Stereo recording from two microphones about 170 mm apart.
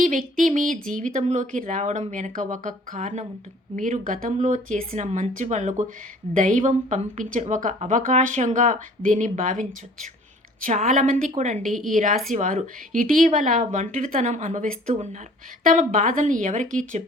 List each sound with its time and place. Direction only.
0.0 s speech: 50° right (ahead or behind)
4.3 s a woman's voice: 45° right (ahead or behind)
11.6 s a woman's voice: centre (ahead or behind)
12.3 s speech: 50° right (ahead or behind)